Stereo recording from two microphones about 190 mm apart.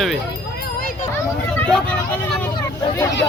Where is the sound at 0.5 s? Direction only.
55° left (ahead or behind).